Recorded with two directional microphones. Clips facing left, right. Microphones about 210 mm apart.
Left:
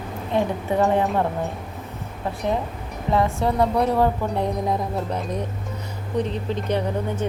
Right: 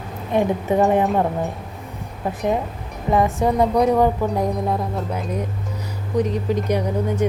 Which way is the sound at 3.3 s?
20° right (ahead or behind).